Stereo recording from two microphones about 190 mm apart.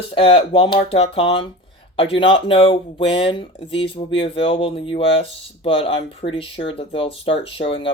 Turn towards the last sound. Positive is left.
turn(degrees=30)  # may be behind; listen again after turning